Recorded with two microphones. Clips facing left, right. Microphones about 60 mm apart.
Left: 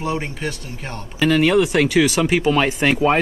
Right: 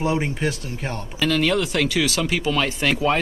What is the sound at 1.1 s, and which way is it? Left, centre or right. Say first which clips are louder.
Speech: left 5 dB; centre.